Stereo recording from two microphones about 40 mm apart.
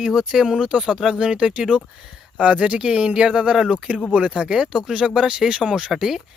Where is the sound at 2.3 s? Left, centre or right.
Right.